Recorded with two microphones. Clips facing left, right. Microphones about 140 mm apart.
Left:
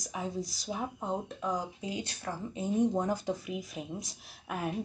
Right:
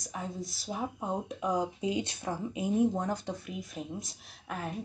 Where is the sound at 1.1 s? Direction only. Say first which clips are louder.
Right 3 dB; 15° right (ahead or behind).